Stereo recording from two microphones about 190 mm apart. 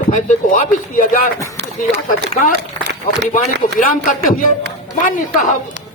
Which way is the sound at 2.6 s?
65° right (ahead or behind).